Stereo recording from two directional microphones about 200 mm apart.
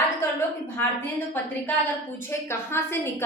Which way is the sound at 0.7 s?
10° left (ahead or behind).